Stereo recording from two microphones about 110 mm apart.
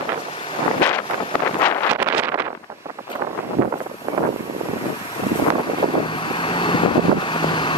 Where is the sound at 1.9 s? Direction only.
15° right (ahead or behind).